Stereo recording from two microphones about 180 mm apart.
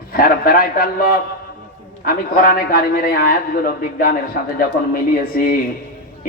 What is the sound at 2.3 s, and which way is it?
A man's voice, 50° left (ahead or behind).